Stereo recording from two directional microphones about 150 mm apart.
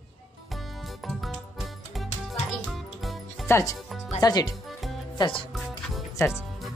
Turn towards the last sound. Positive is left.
turn(degrees=0)  # may be behind; listen again after turning